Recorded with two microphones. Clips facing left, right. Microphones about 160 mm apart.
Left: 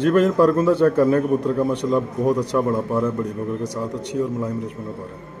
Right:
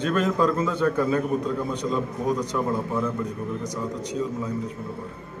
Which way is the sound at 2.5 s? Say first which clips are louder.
Left 5 dB; 80° left.